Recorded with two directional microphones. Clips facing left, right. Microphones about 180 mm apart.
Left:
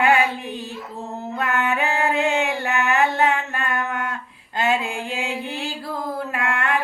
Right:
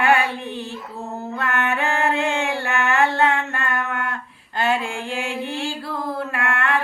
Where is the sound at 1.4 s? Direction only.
15° left (ahead or behind).